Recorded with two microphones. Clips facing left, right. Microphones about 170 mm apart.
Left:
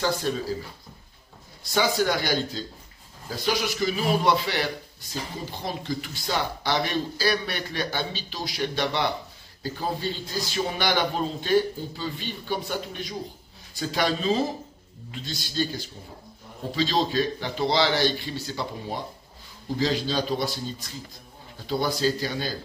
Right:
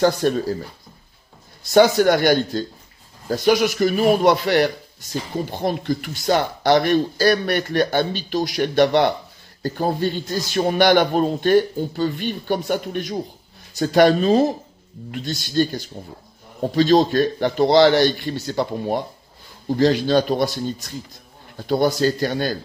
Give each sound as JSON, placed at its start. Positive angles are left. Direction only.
{"t": 0.0, "sound": "speech", "side_deg": -55}
{"t": 1.7, "sound": "speech", "side_deg": -60}
{"t": 16.7, "sound": "speech", "side_deg": -55}